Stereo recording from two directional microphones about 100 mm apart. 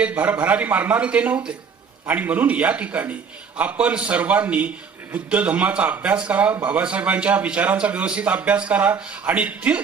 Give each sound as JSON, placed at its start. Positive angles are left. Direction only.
{"t": 0.0, "sound": "a man's voice", "side_deg": -15}